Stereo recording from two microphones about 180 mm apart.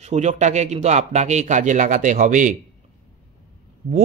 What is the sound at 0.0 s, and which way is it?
Speech, 40° right (ahead or behind).